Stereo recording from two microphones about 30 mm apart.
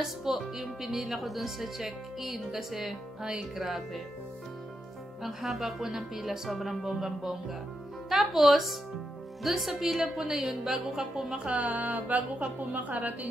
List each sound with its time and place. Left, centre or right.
0.2 s speech: centre
5.2 s a woman's voice: centre; by 10.5 s right
10.5 s speech: centre
11.5 s a woman's voice: right